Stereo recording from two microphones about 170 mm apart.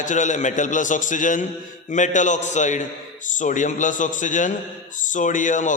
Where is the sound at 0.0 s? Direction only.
45° left (ahead or behind).